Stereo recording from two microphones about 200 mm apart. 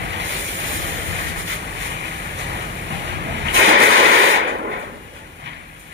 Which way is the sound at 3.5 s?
75° right (ahead or behind).